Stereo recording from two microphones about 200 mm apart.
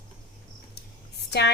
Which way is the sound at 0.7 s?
55° left (ahead or behind).